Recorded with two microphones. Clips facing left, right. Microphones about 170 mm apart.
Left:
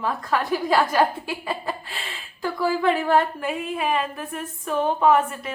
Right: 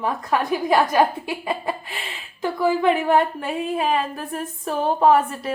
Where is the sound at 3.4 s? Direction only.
40° right (ahead or behind).